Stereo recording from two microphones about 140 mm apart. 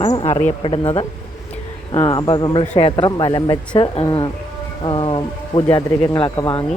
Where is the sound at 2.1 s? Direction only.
30° left (ahead or behind).